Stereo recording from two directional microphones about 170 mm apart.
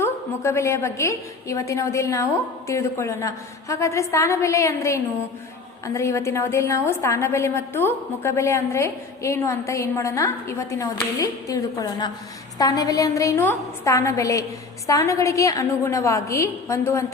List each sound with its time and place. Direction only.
0.0 s a woman's voice: 15° left (ahead or behind)